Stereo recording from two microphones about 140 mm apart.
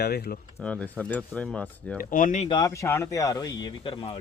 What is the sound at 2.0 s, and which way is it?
Speech, 80° left.